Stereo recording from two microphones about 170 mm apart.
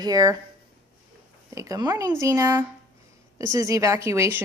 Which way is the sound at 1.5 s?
20° right (ahead or behind).